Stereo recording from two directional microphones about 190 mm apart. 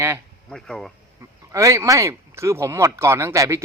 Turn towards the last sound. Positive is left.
turn(degrees=-15)  # may be behind; listen again after turning